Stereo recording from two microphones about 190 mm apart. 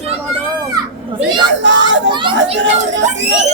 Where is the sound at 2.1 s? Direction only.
25° right (ahead or behind).